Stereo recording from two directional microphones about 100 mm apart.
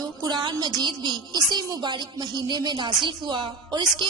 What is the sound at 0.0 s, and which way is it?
A woman's voice, 45° right (ahead or behind).